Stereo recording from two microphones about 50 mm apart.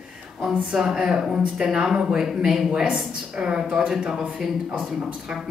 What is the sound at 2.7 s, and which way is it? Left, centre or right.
Speech, right.